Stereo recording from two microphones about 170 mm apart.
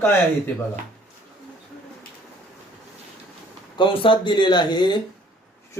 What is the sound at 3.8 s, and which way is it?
Speech, 30° left (ahead or behind).